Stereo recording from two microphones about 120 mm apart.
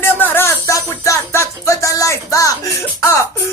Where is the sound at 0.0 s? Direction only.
15° left (ahead or behind).